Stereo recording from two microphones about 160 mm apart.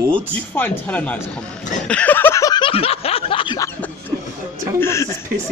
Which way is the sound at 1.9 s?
10° left (ahead or behind).